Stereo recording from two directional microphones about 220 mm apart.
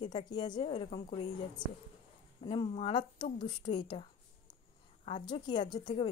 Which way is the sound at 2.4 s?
25° left (ahead or behind).